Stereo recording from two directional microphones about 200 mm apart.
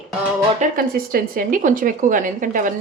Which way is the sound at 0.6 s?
45° right (ahead or behind).